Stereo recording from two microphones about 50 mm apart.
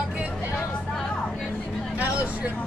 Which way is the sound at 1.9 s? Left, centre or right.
Right.